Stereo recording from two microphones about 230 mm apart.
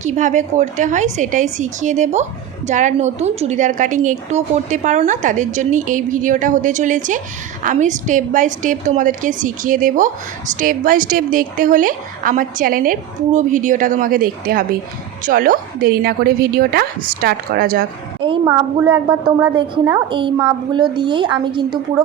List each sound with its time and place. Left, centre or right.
0.0 s a woman's voice: right
18.2 s a woman's voice: centre